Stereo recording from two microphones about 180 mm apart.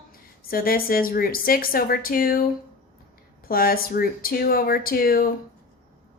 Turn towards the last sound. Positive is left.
turn(degrees=55)  # may be behind; listen again after turning